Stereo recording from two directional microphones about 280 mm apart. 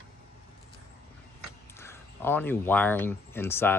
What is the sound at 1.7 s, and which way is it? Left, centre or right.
Speech, centre.